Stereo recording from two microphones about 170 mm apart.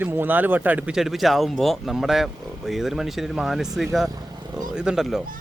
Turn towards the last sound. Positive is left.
turn(degrees=-5)  # may be behind; listen again after turning